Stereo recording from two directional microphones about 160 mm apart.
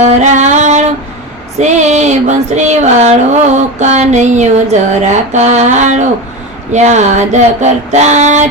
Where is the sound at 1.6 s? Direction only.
45° right (ahead or behind).